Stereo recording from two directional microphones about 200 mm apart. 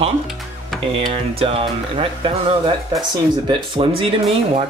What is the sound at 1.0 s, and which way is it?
Speech, 30° right (ahead or behind).